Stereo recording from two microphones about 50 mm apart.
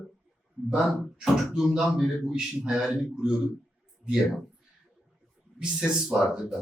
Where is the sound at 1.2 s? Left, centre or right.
Centre.